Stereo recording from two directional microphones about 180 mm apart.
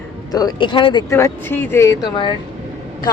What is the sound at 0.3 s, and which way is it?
Speech, 20° left (ahead or behind).